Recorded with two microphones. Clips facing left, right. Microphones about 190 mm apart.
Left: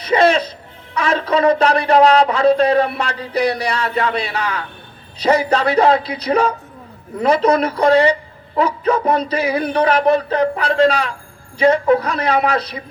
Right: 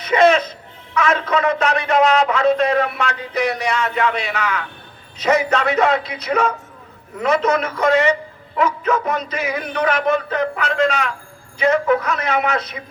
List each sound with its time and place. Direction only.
0.0 s music: 35° left (ahead or behind)
0.9 s a man's voice: 35° left (ahead or behind)